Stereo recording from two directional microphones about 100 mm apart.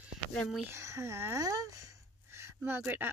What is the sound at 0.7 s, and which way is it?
Speech, 30° right (ahead or behind).